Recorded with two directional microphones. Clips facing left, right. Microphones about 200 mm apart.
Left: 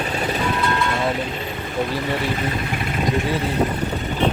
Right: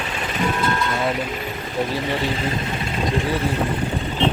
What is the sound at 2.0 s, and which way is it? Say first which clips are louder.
Speech: even; 25° right (ahead or behind).